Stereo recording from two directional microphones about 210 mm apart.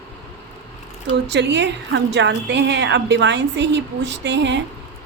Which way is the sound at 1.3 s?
55° right (ahead or behind).